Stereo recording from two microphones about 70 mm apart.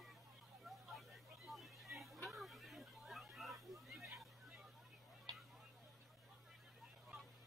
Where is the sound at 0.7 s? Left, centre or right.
Centre.